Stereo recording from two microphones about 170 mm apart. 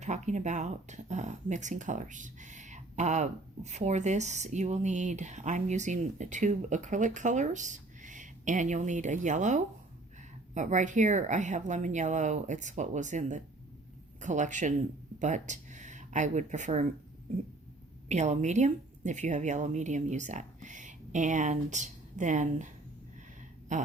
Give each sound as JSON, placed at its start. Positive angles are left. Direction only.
{"t": 0.0, "sound": "speech", "side_deg": -45}
{"t": 18.1, "sound": "a woman's voice", "side_deg": -40}
{"t": 23.7, "sound": "speech", "side_deg": -45}